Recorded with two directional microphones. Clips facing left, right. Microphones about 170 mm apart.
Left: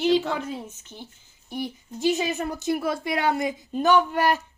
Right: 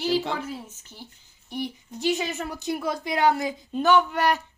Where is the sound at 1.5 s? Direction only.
45° left (ahead or behind).